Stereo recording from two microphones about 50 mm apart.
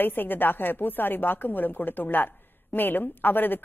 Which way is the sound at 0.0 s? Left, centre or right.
Left.